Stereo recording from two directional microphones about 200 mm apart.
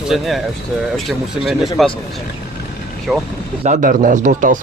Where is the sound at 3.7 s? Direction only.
40° right (ahead or behind).